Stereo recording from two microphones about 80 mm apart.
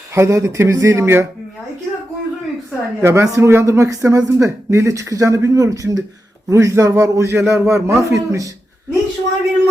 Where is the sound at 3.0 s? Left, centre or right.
Right.